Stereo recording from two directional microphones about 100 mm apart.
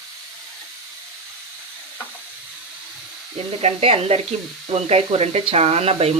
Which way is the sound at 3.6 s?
90° right.